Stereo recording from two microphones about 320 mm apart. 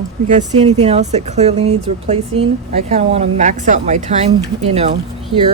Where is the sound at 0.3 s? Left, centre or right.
Right.